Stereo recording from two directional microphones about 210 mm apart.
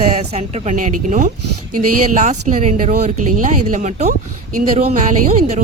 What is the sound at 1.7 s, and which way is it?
Speech, 90° right.